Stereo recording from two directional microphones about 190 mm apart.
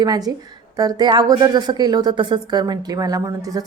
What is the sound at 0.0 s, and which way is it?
Speech, 20° right (ahead or behind).